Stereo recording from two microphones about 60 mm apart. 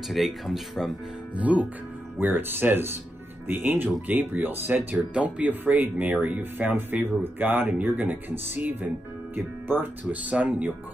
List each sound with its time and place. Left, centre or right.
0.1 s speech: centre
1.3 s speech: right
10.3 s speech: right